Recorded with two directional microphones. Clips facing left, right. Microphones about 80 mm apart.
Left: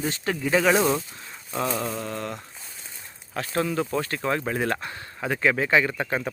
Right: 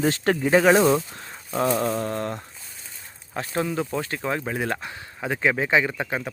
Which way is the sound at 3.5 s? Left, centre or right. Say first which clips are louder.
Left 1 dB; centre.